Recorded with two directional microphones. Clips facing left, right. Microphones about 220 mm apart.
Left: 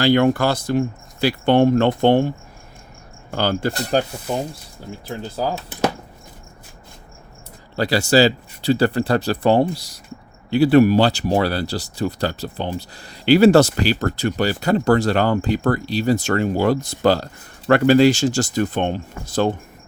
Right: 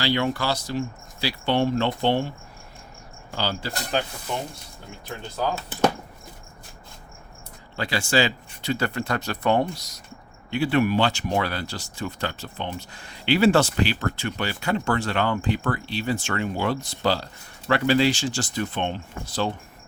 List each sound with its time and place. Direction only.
0.0 s speech: 50° left (ahead or behind)
3.3 s speech: 55° left (ahead or behind)
7.8 s speech: 40° left (ahead or behind)